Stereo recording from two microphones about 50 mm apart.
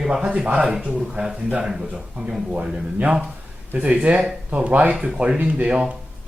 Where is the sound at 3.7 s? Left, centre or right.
Right.